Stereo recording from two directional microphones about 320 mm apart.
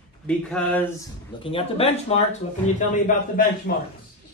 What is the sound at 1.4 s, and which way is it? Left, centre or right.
Speech, centre.